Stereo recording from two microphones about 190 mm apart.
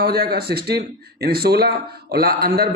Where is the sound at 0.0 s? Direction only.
55° right (ahead or behind).